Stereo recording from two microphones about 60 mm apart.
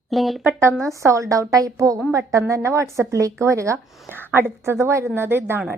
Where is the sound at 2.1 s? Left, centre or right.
Right.